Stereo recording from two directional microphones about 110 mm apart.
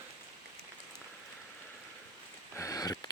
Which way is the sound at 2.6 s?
35° left (ahead or behind).